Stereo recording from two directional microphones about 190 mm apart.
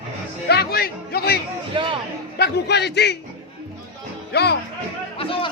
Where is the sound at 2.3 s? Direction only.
60° left (ahead or behind).